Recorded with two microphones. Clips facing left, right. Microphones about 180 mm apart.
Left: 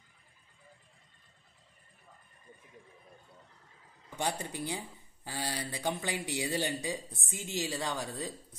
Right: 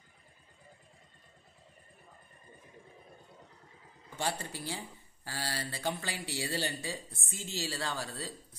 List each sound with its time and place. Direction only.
4.2 s speech: 15° left (ahead or behind)